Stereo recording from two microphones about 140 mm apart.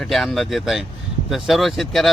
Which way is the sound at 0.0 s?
Centre (ahead or behind).